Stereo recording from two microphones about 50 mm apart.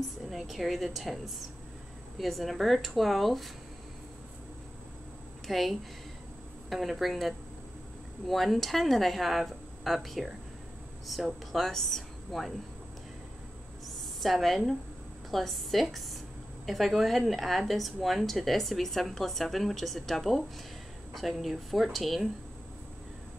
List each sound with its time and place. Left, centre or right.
0.3 s a woman's voice: centre
5.5 s a woman's voice: centre
13.8 s a sound: centre
15.3 s a woman's voice: centre